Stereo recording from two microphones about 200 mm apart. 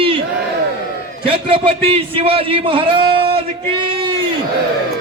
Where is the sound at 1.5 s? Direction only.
30° right (ahead or behind).